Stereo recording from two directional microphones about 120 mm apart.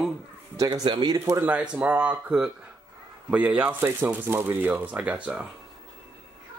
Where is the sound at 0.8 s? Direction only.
45° right (ahead or behind).